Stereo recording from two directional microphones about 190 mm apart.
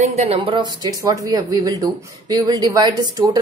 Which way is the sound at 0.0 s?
35° right (ahead or behind).